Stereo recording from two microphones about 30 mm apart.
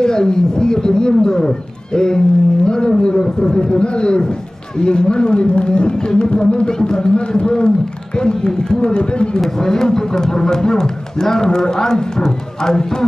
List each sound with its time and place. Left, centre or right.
0.0 s speech: left
9.6 s speech: centre